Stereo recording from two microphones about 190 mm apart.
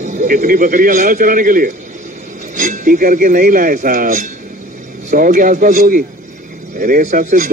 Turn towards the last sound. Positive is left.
turn(degrees=-45)  # may be behind; listen again after turning